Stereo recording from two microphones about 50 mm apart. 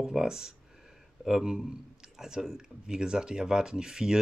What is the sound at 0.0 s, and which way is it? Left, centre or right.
Speech, centre.